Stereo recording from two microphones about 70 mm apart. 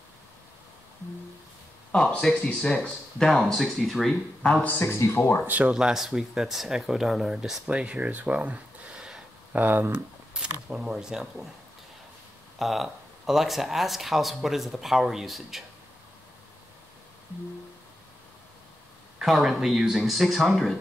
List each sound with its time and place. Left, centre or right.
1.9 s speech: centre
4.6 s speech: left
5.7 s speech: centre
9.6 s speech: right
10.4 s speech: centre
12.5 s speech: centre
19.1 s speech: centre